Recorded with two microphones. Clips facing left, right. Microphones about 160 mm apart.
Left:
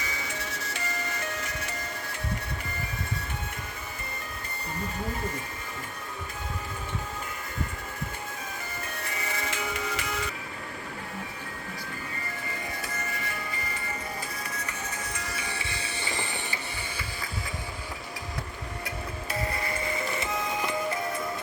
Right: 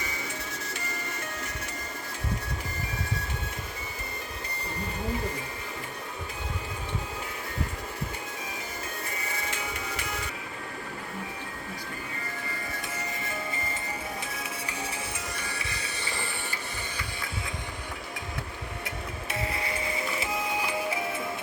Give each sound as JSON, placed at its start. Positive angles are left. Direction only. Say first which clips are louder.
{"t": 0.0, "sound": "music", "louder": "left 1 dB", "side_deg": 90}
{"t": 9.0, "sound": "music", "louder": "left 1 dB", "side_deg": 85}
{"t": 13.0, "sound": "music", "louder": "right 1 dB", "side_deg": -20}
{"t": 14.2, "sound": "music", "louder": "even", "side_deg": 0}
{"t": 15.5, "sound": "music", "louder": "left 1 dB", "side_deg": 25}
{"t": 17.0, "sound": "music", "louder": "even", "side_deg": 0}
{"t": 20.1, "sound": "music", "louder": "even", "side_deg": -10}